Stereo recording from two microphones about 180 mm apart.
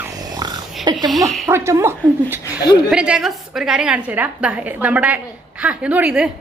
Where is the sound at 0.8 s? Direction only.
20° right (ahead or behind).